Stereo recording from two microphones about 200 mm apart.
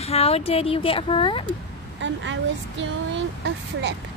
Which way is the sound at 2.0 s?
65° right (ahead or behind).